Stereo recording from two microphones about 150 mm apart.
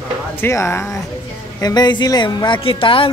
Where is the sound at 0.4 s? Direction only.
15° left (ahead or behind).